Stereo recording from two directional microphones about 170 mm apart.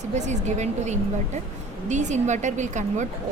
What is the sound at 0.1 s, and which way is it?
Speech, 45° right (ahead or behind).